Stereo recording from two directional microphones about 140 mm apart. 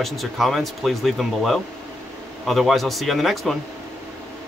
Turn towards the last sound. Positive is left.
turn(degrees=0)  # may be behind; listen again after turning